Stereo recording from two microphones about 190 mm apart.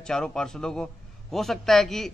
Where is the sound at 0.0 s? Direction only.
5° left (ahead or behind).